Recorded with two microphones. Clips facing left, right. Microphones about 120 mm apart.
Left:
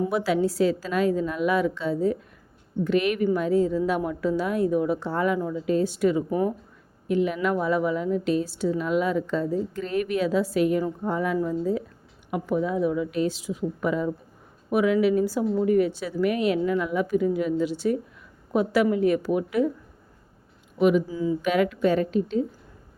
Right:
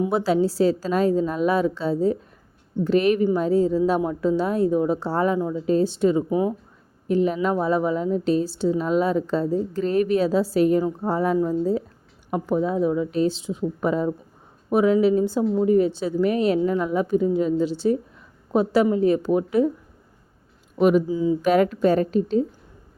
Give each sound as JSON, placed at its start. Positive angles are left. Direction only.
{"t": 0.1, "sound": "a woman's voice", "side_deg": -30}
{"t": 20.7, "sound": "speech", "side_deg": -40}
{"t": 21.1, "sound": "a woman's voice", "side_deg": -20}
{"t": 21.4, "sound": "a woman's voice", "side_deg": -40}